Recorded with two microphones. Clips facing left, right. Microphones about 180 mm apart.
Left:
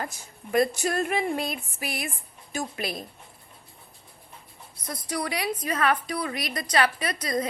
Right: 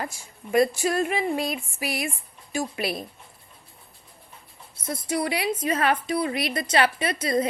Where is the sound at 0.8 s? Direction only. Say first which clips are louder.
Right 2 dB; 45° left (ahead or behind).